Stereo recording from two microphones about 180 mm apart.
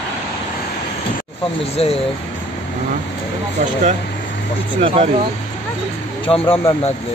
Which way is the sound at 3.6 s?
50° right (ahead or behind).